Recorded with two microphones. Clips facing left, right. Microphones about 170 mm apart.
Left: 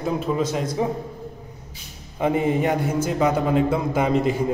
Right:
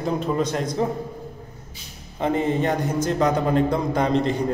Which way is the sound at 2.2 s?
10° left (ahead or behind).